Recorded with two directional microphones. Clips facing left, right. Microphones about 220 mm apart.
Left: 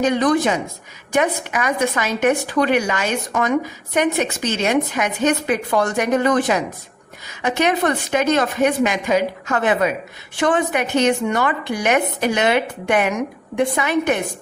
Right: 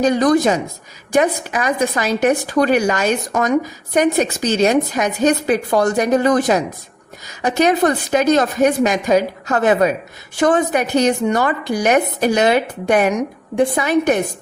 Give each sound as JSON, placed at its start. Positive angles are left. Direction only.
{"t": 0.0, "sound": "a woman's voice", "side_deg": -40}